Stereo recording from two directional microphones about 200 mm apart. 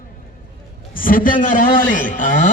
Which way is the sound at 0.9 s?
45° left (ahead or behind).